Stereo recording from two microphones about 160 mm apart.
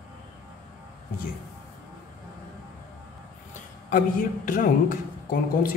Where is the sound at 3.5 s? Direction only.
55° left (ahead or behind).